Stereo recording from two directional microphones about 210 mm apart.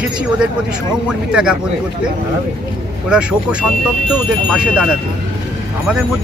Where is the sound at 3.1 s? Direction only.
5° right (ahead or behind).